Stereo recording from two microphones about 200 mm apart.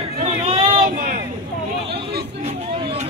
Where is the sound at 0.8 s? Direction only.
45° right (ahead or behind).